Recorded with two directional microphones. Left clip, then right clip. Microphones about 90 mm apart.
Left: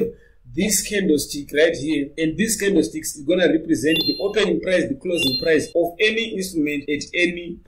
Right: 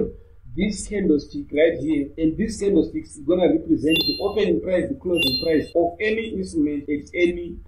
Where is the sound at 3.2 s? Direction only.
60° left (ahead or behind).